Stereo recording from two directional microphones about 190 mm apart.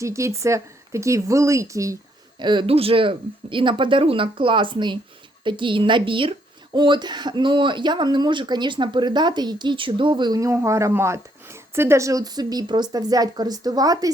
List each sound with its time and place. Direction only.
0.0 s speech: 15° right (ahead or behind)